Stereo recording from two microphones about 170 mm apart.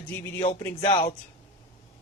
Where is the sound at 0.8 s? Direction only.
30° left (ahead or behind).